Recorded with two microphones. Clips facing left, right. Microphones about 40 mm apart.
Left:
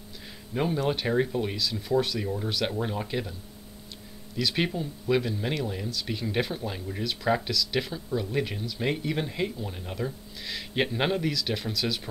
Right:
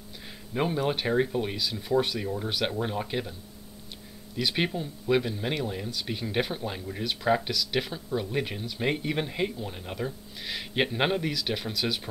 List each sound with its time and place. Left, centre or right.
0.6 s speech: centre
4.4 s speech: centre